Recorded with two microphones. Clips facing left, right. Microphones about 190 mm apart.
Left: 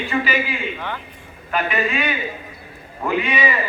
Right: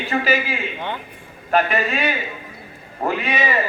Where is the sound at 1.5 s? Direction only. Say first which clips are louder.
Right 2 dB; 40° right (ahead or behind).